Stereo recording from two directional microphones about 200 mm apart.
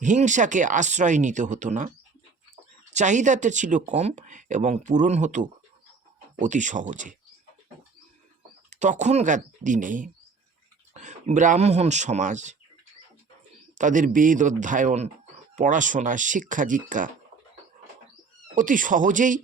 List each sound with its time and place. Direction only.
0.0 s speech: 40° right (ahead or behind)
2.9 s speech: 35° right (ahead or behind)
8.7 s speech: 35° right (ahead or behind)
13.7 s speech: 40° right (ahead or behind)
18.5 s speech: 40° right (ahead or behind)